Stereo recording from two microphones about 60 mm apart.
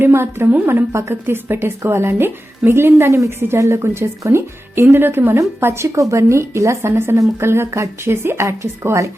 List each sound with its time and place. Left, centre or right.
0.0 s a woman's voice: right
3.2 s a woman's voice: right